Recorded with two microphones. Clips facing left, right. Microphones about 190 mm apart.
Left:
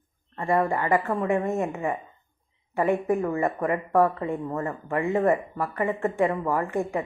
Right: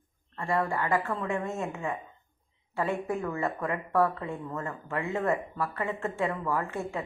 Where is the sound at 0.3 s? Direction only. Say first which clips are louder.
Left 5 dB; 20° left (ahead or behind).